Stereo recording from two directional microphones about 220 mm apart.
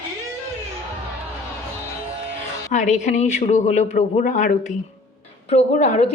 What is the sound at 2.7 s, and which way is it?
Speech, 30° left (ahead or behind).